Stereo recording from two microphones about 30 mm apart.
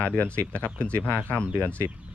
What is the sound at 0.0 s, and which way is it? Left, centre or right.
Speech, left.